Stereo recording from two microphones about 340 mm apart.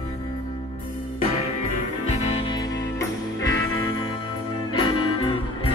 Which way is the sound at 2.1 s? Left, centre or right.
Centre.